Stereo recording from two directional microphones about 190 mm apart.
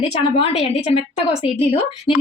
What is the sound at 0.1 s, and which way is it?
A woman's voice, 30° left (ahead or behind).